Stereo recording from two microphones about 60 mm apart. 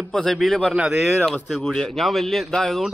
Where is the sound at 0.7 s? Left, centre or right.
Centre.